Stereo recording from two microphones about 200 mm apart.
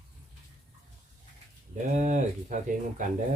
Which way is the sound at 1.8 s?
40° right (ahead or behind).